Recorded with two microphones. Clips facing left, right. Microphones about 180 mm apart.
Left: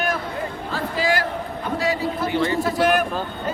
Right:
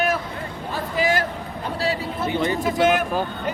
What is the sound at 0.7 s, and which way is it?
Speech, 20° right (ahead or behind).